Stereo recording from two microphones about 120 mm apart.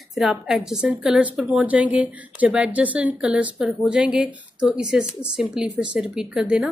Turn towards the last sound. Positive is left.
turn(degrees=-5)  # may be behind; listen again after turning